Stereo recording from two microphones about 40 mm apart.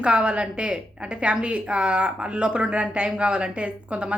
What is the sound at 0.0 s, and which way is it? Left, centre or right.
A woman's voice, right.